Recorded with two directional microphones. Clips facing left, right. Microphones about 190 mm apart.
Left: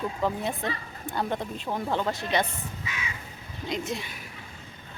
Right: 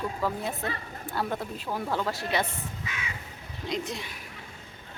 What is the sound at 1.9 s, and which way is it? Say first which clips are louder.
Speech: left 2 dB; 20° left (ahead or behind).